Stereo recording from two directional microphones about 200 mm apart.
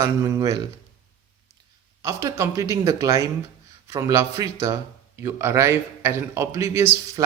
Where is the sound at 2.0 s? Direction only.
15° right (ahead or behind).